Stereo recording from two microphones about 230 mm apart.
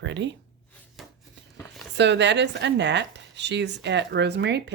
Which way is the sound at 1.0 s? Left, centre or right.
Centre.